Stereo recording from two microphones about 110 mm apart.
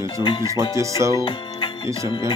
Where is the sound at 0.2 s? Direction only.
50° left (ahead or behind).